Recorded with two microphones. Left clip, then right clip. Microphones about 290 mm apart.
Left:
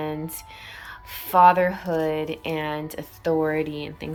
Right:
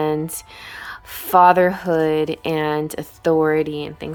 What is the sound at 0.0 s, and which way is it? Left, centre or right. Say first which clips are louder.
A woman's voice: right 9 dB; centre.